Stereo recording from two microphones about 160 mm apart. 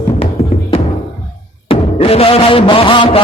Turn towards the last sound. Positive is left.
turn(degrees=30)  # may be behind; listen again after turning